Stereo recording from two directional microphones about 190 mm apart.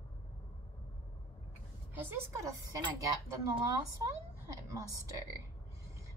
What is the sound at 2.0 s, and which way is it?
Speech, 15° right (ahead or behind).